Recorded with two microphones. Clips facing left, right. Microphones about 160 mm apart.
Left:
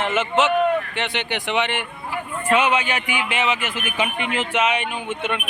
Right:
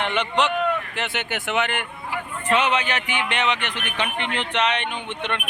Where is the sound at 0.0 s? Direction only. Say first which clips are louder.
Left 3 dB; 5° left (ahead or behind).